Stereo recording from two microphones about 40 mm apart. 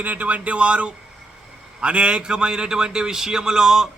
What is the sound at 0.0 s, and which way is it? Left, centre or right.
A man's voice, right.